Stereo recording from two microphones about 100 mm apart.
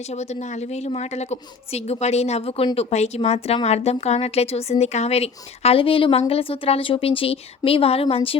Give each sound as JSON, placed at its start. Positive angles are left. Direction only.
{"t": 0.0, "sound": "a woman's voice", "side_deg": 90}
{"t": 2.7, "sound": "a woman's voice", "side_deg": 90}